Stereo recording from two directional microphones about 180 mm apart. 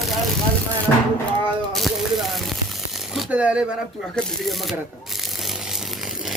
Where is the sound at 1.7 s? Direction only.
Centre (ahead or behind).